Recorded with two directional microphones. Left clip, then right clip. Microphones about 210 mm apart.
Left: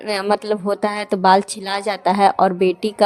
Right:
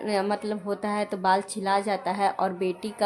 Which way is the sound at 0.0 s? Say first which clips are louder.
Left 7 dB; 40° left (ahead or behind).